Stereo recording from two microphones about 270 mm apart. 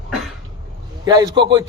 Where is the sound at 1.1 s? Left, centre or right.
Centre.